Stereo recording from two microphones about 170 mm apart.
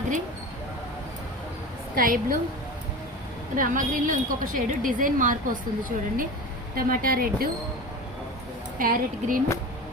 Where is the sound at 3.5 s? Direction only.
50° right (ahead or behind).